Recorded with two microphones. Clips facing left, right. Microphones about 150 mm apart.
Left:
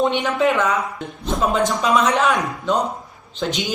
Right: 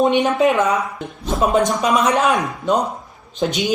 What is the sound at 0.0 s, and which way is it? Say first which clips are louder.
Speech: right 3 dB; 20° right (ahead or behind).